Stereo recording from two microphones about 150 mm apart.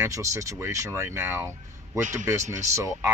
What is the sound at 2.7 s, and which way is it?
Speech, 20° right (ahead or behind).